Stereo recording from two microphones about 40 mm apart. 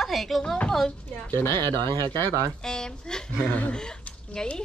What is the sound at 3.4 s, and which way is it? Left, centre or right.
Speech, left.